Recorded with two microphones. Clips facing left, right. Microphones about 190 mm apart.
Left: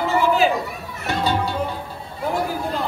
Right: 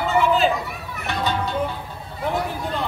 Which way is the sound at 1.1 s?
35° left (ahead or behind).